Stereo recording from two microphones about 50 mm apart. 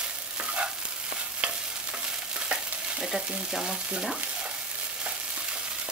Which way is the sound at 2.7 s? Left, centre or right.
Centre.